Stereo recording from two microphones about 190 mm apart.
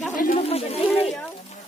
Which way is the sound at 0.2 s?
45° left (ahead or behind).